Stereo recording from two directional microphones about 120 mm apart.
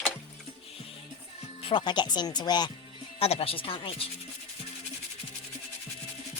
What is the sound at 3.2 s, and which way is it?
Speech, 55° left (ahead or behind).